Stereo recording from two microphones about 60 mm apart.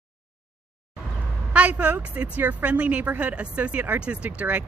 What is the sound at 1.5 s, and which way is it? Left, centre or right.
Speech, right.